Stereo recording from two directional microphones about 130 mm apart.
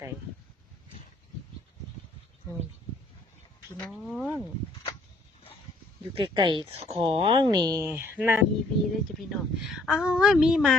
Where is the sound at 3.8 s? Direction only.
Centre (ahead or behind).